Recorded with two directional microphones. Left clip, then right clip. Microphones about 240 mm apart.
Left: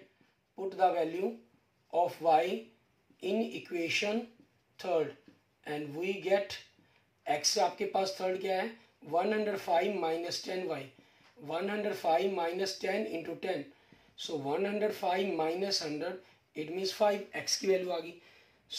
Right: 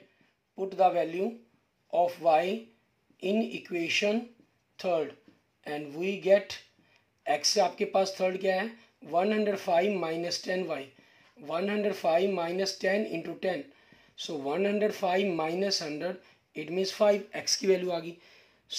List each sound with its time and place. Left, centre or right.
0.6 s speech: right
18.7 s gasp: right